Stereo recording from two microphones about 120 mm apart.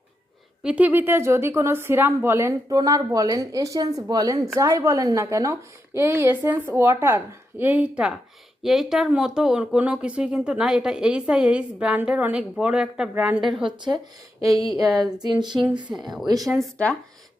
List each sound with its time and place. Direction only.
0.6 s a woman's voice: 10° right (ahead or behind)
13.7 s speech: 40° right (ahead or behind)
15.9 s a woman's voice: centre (ahead or behind)
16.7 s speech: 10° left (ahead or behind)